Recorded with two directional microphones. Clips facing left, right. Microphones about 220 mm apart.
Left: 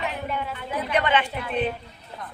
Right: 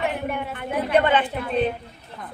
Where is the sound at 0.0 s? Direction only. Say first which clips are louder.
Right 3 dB; 55° right (ahead or behind).